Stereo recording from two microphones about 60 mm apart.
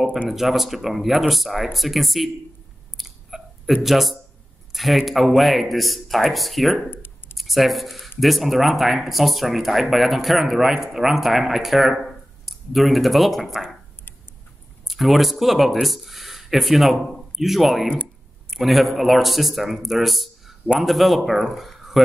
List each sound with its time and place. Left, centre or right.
0.3 s speech: centre
3.0 s a sound: centre
4.7 s speech: centre
6.9 s a sound: left
7.3 s speech: centre
14.9 s speech: centre